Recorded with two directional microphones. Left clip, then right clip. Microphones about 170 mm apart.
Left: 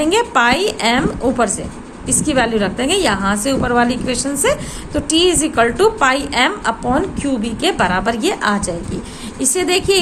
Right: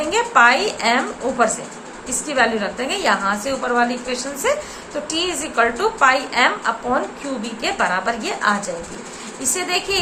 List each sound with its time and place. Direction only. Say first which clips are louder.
0.1 s a woman's voice: right 2 dB; 65° left (ahead or behind)